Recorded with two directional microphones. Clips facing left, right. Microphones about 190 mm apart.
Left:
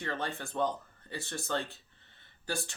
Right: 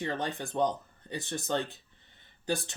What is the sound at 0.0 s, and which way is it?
Speech, 15° right (ahead or behind).